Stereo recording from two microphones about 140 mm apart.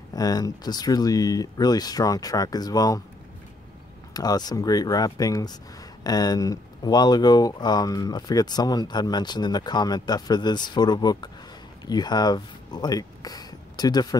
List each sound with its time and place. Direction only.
0.1 s speech: 25° left (ahead or behind)
4.1 s speech: 25° left (ahead or behind)